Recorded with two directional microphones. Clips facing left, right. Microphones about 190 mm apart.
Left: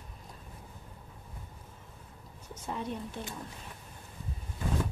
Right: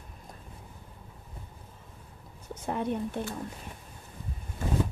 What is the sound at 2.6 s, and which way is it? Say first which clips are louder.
Speech: right 6 dB; 55° right (ahead or behind).